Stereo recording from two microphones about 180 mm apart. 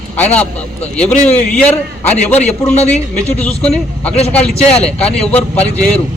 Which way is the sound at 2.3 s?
40° left (ahead or behind).